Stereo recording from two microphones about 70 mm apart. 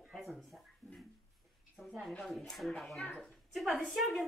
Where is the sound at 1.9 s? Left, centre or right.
Centre.